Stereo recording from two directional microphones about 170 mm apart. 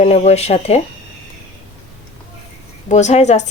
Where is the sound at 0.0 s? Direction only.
40° left (ahead or behind).